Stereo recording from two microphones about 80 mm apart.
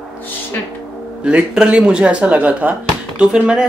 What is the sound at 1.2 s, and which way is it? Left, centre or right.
Speech, centre.